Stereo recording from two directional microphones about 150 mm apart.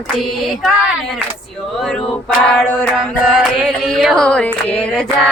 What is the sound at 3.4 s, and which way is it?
Mantra, 5° right (ahead or behind).